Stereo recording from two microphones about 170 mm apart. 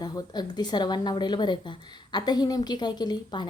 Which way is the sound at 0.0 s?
25° left (ahead or behind).